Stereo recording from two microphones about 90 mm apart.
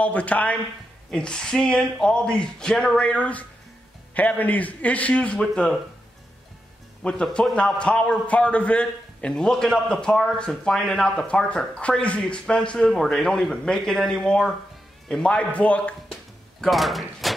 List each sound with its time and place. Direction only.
0.0 s a man's voice: 15° left (ahead or behind)
7.0 s a man's voice: 10° left (ahead or behind)
16.6 s speech: centre (ahead or behind)